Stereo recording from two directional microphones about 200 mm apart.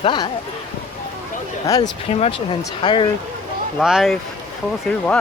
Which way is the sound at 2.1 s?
30° left (ahead or behind).